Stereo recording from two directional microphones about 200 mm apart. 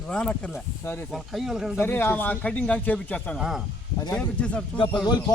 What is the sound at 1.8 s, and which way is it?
Speech, 10° left (ahead or behind).